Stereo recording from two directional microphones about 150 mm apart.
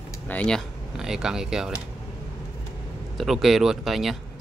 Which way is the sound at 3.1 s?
Centre (ahead or behind).